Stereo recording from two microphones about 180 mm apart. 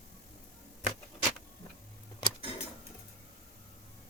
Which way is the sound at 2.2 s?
25° left (ahead or behind).